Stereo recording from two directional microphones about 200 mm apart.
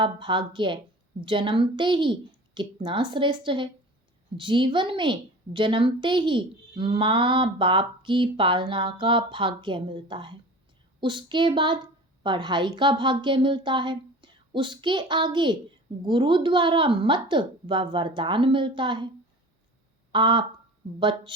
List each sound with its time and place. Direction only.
0.0 s a woman's voice: 25° right (ahead or behind)
20.1 s a woman's voice: 25° right (ahead or behind)